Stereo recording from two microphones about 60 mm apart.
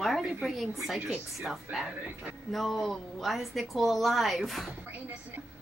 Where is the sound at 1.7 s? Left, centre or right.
Right.